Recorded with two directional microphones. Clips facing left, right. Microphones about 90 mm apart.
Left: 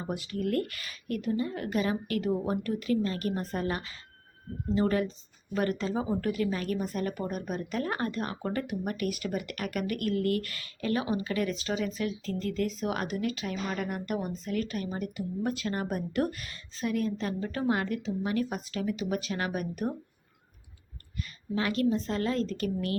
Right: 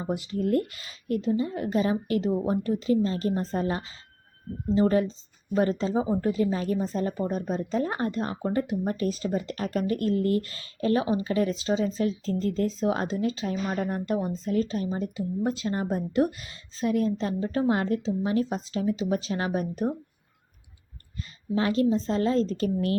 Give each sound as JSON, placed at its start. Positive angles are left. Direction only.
{"t": 0.0, "sound": "speech", "side_deg": -20}
{"t": 21.5, "sound": "speech", "side_deg": -30}